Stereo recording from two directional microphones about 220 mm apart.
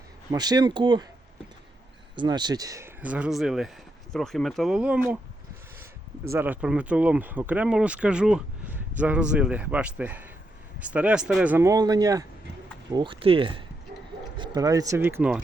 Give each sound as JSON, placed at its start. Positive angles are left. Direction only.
{"t": 0.3, "sound": "speech", "side_deg": -20}
{"t": 2.1, "sound": "speech", "side_deg": -20}
{"t": 6.3, "sound": "speech", "side_deg": -10}